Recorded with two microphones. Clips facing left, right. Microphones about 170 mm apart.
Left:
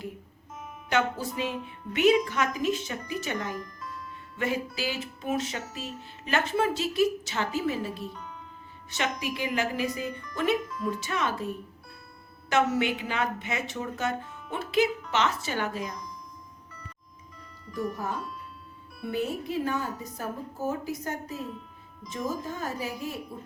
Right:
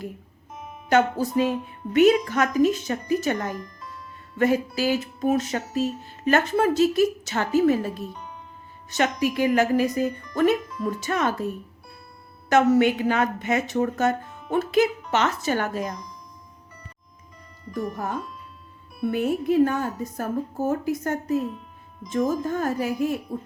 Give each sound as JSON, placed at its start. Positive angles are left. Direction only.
{"t": 0.9, "sound": "music", "side_deg": -40}
{"t": 8.1, "sound": "music", "side_deg": -20}
{"t": 9.0, "sound": "music", "side_deg": -45}
{"t": 12.5, "sound": "music", "side_deg": -45}
{"t": 19.0, "sound": "music", "side_deg": -55}